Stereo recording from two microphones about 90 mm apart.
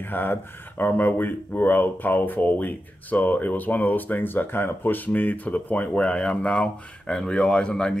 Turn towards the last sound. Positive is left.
turn(degrees=10)  # may be behind; listen again after turning